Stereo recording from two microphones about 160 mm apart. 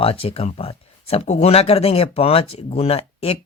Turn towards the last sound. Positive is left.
turn(degrees=40)  # may be behind; listen again after turning